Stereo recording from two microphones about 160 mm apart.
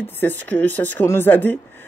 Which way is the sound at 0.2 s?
10° left (ahead or behind).